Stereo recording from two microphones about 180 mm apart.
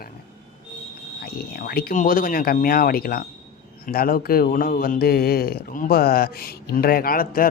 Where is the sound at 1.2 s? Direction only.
55° left (ahead or behind).